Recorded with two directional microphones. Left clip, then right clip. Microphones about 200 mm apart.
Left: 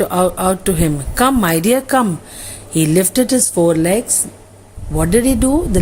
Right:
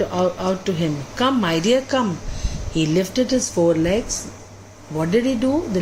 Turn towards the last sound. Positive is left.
turn(degrees=50)  # may be behind; listen again after turning